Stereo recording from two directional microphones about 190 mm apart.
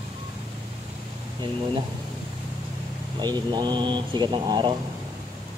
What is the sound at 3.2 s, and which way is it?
Speech, 20° right (ahead or behind).